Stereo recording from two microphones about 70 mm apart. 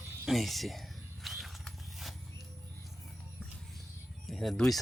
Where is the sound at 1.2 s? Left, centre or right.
Centre.